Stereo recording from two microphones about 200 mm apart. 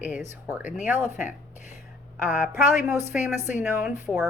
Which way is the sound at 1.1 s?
35° left (ahead or behind).